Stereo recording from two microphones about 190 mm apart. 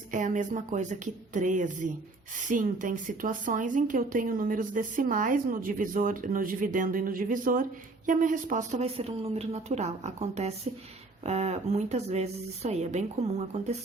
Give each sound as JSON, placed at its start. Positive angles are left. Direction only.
{"t": 0.1, "sound": "speech", "side_deg": -40}